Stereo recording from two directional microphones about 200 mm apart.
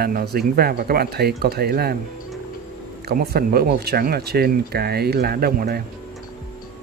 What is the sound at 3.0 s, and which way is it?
Speech, 50° right (ahead or behind).